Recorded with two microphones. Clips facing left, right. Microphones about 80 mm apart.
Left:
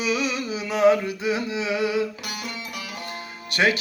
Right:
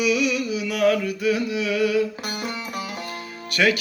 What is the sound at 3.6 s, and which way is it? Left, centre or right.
Speech, left.